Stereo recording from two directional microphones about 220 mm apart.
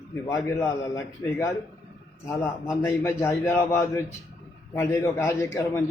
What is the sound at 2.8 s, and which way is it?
A man's voice, 10° left (ahead or behind).